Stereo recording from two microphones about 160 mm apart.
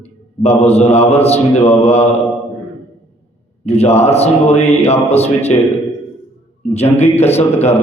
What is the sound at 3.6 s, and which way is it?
Music, 40° left (ahead or behind).